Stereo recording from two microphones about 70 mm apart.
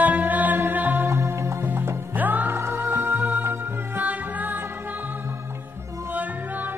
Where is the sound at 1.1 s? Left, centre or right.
Right.